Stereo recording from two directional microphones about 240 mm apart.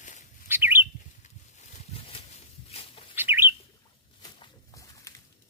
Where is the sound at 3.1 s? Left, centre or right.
Centre.